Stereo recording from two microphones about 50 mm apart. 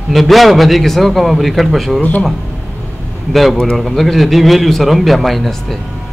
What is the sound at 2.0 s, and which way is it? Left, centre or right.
Speech, left.